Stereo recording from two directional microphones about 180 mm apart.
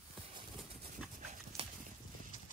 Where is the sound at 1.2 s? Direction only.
40° right (ahead or behind).